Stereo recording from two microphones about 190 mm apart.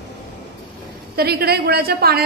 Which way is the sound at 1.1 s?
55° right (ahead or behind).